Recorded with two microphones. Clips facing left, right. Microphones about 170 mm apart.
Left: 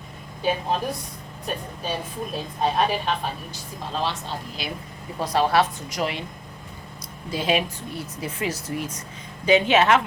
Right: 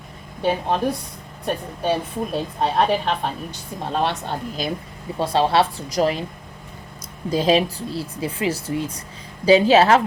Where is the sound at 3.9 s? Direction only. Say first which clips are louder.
Right 5 dB; 60° right (ahead or behind).